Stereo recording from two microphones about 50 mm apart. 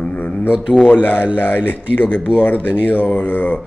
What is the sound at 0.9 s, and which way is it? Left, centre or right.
Speech, left.